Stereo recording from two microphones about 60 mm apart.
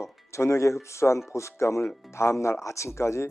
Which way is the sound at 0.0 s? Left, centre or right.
Left.